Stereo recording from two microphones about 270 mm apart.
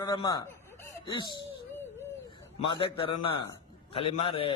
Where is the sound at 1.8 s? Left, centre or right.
Centre.